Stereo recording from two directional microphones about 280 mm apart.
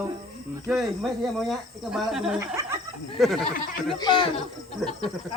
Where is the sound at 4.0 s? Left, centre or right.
Centre.